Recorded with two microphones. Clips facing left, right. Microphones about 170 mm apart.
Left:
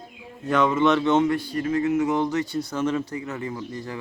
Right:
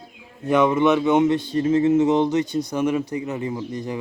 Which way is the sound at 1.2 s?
20° right (ahead or behind).